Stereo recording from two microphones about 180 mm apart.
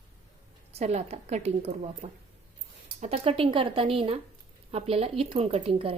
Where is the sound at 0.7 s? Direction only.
35° right (ahead or behind).